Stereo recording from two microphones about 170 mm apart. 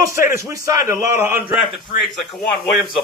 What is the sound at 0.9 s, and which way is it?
Speech, 15° right (ahead or behind).